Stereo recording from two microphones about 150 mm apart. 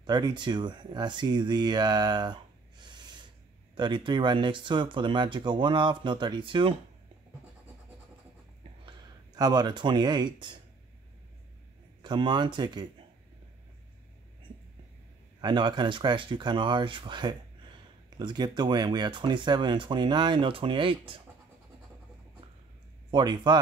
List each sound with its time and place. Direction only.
0.0 s speech: 30° right (ahead or behind)
2.8 s snort: 30° right (ahead or behind)
3.7 s speech: 30° right (ahead or behind)
8.8 s speech: 25° right (ahead or behind)
12.0 s speech: 30° right (ahead or behind)
15.4 s speech: 30° right (ahead or behind)
23.1 s speech: 30° right (ahead or behind)